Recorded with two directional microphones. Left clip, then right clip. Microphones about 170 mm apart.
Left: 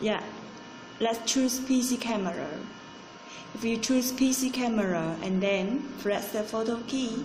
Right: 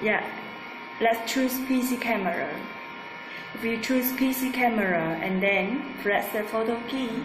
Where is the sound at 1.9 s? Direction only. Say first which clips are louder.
Right 5 dB; 25° left (ahead or behind).